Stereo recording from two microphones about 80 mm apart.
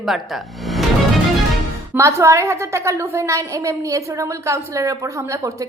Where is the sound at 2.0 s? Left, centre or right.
Right.